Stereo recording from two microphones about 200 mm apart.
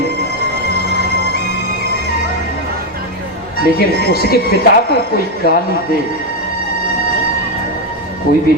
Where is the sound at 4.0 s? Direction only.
50° left (ahead or behind).